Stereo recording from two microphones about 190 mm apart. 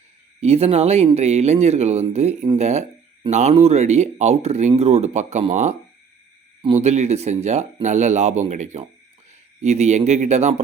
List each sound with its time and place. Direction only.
0.4 s speech: 35° right (ahead or behind)
6.8 s speech: 35° right (ahead or behind)